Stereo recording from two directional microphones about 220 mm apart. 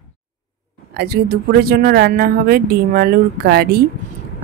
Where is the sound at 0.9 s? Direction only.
45° right (ahead or behind).